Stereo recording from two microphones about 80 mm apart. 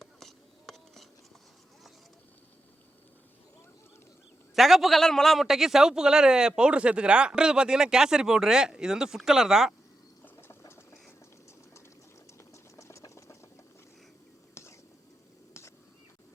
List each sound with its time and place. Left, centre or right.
0.0 s whispering: centre
4.5 s a man's voice: centre
10.6 s engine: left
12.7 s engine: left
14.5 s whispering: left